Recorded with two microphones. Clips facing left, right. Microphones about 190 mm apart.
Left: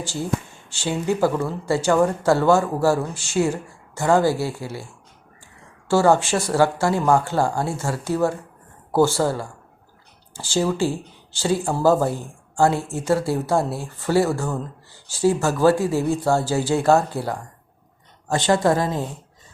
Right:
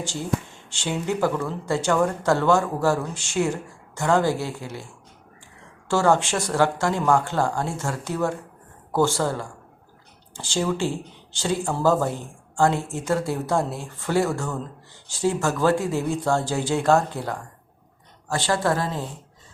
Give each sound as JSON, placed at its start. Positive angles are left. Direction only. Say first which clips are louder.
{"t": 0.8, "sound": "speech", "louder": "left 3 dB", "side_deg": 10}
{"t": 5.9, "sound": "speech", "louder": "left 3 dB", "side_deg": 10}
{"t": 18.3, "sound": "speech", "louder": "left 4 dB", "side_deg": 20}